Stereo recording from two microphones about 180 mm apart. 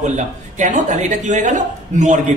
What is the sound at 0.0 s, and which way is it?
A woman's voice, 40° right (ahead or behind).